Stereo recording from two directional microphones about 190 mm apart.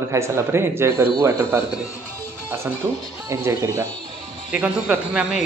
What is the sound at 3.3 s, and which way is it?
Speech, 15° right (ahead or behind).